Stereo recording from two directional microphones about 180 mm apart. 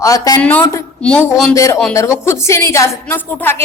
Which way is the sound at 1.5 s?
15° left (ahead or behind).